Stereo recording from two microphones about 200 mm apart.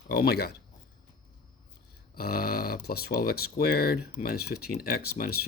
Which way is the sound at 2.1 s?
50° left (ahead or behind).